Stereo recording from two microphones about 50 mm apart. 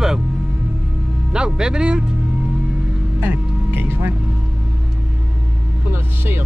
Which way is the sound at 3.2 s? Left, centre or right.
Right.